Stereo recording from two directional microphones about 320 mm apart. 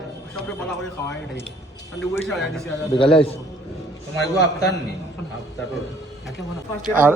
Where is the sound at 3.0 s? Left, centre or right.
Centre.